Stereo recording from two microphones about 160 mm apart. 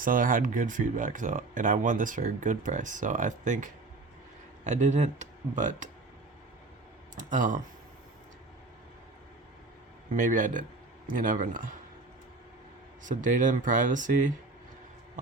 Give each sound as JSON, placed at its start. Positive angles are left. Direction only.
{"t": 0.0, "sound": "speech", "side_deg": -60}
{"t": 7.2, "sound": "speech", "side_deg": -55}
{"t": 10.2, "sound": "speech", "side_deg": -55}
{"t": 13.0, "sound": "speech", "side_deg": -55}